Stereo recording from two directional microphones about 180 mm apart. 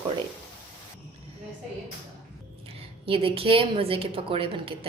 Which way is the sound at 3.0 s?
30° right (ahead or behind).